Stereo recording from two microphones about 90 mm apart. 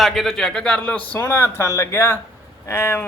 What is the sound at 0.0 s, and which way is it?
A man's voice, centre (ahead or behind).